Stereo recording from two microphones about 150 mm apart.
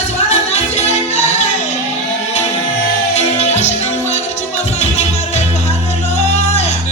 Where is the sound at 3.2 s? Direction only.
45° left (ahead or behind).